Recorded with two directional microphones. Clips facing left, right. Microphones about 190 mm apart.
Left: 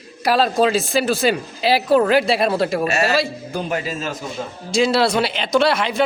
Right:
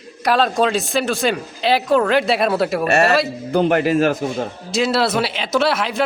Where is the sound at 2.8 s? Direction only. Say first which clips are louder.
Right 3 dB; 55° right (ahead or behind).